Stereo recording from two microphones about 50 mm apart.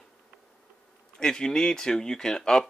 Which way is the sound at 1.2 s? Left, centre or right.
Centre.